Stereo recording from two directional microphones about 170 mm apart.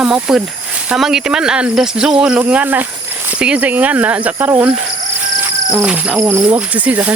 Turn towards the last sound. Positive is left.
turn(degrees=-10)  # may be behind; listen again after turning